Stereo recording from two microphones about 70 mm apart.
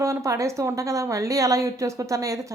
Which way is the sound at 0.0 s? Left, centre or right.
Right.